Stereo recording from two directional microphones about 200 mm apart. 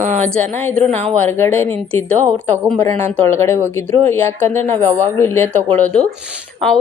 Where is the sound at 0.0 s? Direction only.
40° right (ahead or behind).